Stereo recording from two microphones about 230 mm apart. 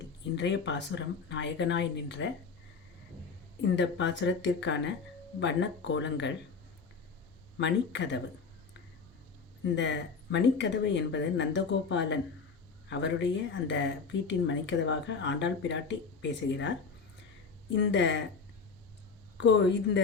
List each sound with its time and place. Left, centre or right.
0.3 s speech: left
3.6 s speech: left
7.6 s speech: left
9.7 s speech: left
17.7 s speech: left
19.4 s speech: left